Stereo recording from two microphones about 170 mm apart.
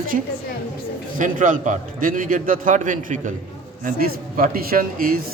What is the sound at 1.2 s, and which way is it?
A man's voice, 50° right (ahead or behind).